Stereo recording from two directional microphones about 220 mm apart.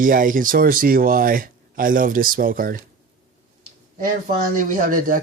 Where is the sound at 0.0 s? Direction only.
40° right (ahead or behind).